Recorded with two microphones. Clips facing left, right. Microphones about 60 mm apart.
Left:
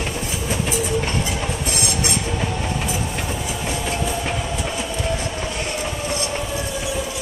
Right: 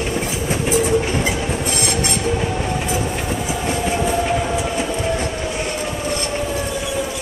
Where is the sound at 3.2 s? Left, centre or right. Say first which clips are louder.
Right 3 dB; centre.